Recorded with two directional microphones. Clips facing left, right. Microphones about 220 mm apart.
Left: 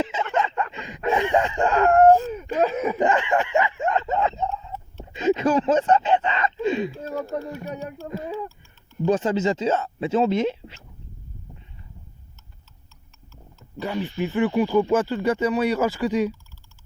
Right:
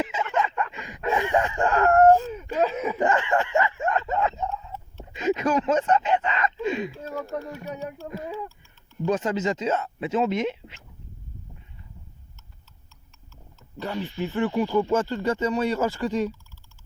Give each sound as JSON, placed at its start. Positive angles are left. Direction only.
{"t": 0.0, "sound": "a sound", "side_deg": 25}
{"t": 2.2, "sound": "speech", "side_deg": 50}
{"t": 3.0, "sound": "speech", "side_deg": 20}
{"t": 9.0, "sound": "speech", "side_deg": 30}
{"t": 13.7, "sound": "speech", "side_deg": 15}